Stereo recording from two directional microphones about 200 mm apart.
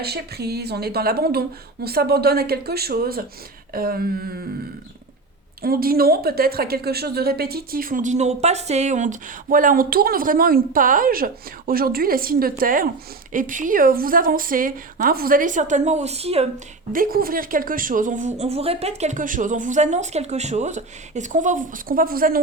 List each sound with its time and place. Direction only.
0.0 s a woman's voice: 55° right (ahead or behind)
5.6 s a woman's voice: 50° right (ahead or behind); by 16.5 s 30° right (ahead or behind)
16.9 s a woman's voice: 45° right (ahead or behind)